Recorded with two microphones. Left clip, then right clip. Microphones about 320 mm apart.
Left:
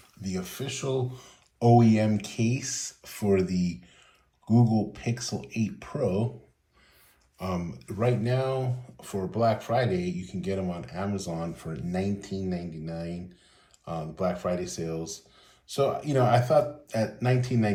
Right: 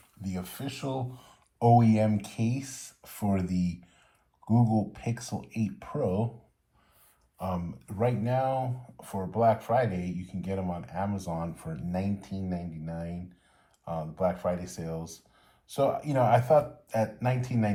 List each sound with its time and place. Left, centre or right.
0.3 s speech: centre
7.3 s speech: centre